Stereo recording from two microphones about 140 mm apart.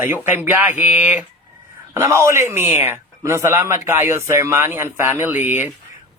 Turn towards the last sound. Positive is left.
turn(degrees=-15)  # may be behind; listen again after turning